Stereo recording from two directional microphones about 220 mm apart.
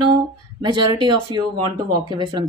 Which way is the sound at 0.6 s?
20° right (ahead or behind).